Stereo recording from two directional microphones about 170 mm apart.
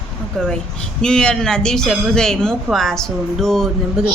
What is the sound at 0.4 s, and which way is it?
A woman's voice, centre (ahead or behind).